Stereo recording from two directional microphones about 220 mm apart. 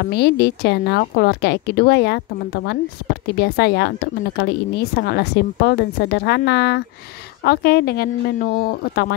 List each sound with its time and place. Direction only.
0.0 s speech: 45° left (ahead or behind)